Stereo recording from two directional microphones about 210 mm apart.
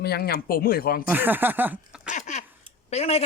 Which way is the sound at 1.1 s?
10° right (ahead or behind).